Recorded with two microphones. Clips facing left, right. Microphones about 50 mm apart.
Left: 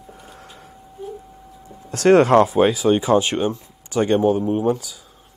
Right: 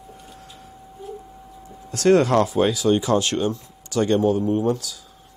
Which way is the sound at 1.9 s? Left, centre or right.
Left.